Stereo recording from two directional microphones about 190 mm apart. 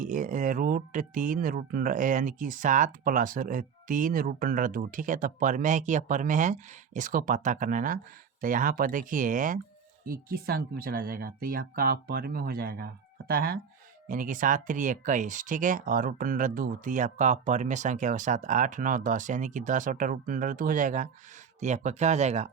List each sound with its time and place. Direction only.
0.0 s speech: 45° right (ahead or behind)